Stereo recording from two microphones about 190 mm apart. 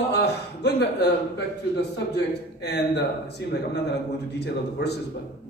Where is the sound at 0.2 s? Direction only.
60° left (ahead or behind).